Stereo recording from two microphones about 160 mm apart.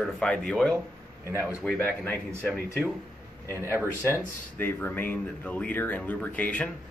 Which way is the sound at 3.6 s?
15° right (ahead or behind).